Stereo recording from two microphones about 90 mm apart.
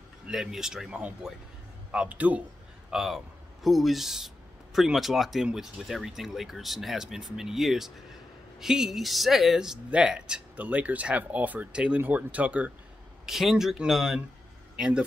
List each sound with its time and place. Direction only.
0.3 s speech: 5° right (ahead or behind)
2.9 s a man's voice: 5° right (ahead or behind)
13.2 s speech: 5° right (ahead or behind)